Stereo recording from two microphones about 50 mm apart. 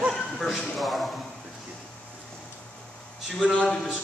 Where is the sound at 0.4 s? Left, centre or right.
Centre.